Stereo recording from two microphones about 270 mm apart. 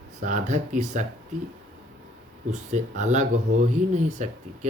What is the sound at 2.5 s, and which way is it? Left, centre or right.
Speech, right.